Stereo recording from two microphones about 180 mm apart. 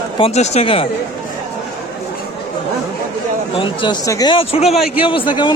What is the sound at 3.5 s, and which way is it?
Speech, 30° left (ahead or behind).